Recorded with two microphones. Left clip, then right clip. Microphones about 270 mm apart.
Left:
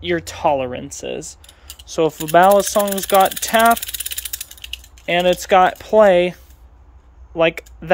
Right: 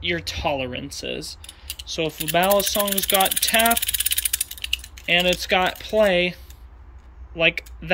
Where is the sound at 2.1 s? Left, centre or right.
Centre.